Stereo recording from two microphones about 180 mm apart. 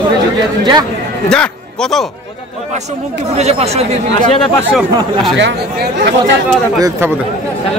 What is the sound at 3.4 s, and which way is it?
Speech, 35° right (ahead or behind).